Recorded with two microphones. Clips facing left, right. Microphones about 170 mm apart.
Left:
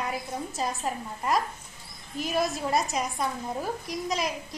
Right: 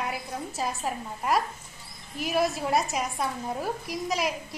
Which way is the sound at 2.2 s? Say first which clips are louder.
Right 1 dB; 5° right (ahead or behind).